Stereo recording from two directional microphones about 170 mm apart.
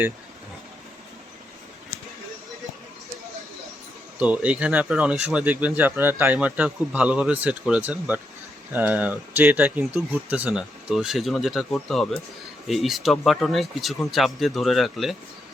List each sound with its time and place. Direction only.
4.2 s speech: 5° right (ahead or behind)